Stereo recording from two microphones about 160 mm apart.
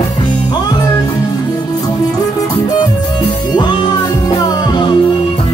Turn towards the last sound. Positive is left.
turn(degrees=30)  # may be behind; listen again after turning